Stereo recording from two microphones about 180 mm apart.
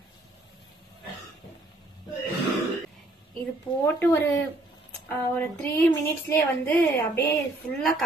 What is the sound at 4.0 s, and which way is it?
Speech, 10° left (ahead or behind).